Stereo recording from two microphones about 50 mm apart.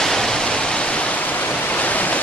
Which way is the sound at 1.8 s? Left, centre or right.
Left.